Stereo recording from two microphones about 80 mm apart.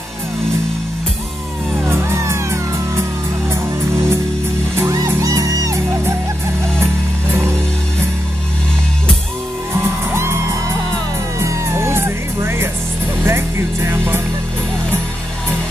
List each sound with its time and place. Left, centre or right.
1.9 s music: right
4.7 s music: right
11.3 s music: right